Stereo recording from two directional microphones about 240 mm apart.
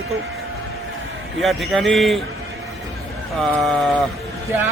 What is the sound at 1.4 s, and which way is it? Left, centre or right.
Speech, centre.